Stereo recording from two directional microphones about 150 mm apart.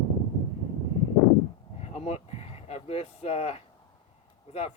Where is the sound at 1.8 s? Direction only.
45° left (ahead or behind).